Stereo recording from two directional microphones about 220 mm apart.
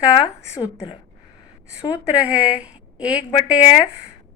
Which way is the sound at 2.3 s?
5° right (ahead or behind).